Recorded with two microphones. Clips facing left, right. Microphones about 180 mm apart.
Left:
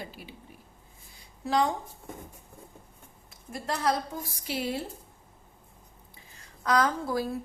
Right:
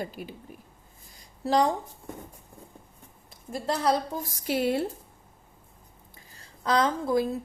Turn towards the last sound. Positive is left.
turn(degrees=-20)  # may be behind; listen again after turning